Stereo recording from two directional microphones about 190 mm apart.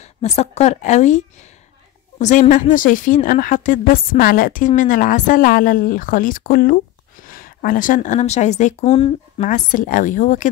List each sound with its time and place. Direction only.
0.0 s a woman's voice: 35° left (ahead or behind)
9.4 s a woman's voice: 45° left (ahead or behind)